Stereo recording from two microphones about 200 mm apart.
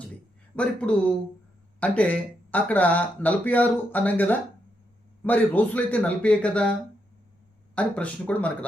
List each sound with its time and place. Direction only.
0.5 s speech: 5° left (ahead or behind)
7.8 s speech: 5° left (ahead or behind)